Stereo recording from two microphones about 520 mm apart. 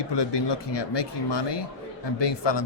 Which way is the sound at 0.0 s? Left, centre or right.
Left.